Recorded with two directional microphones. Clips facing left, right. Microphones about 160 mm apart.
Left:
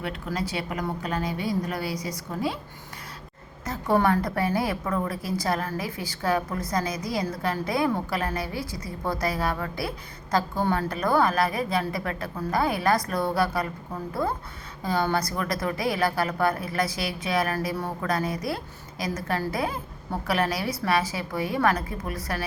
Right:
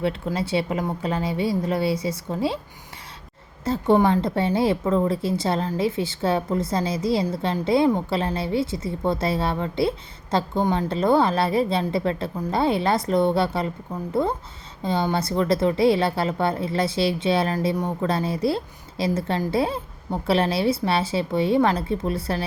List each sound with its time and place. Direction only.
0.3 s a woman's voice: 30° right (ahead or behind)
3.6 s a woman's voice: 25° right (ahead or behind)